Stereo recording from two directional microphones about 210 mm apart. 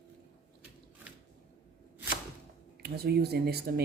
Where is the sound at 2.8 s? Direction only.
50° right (ahead or behind).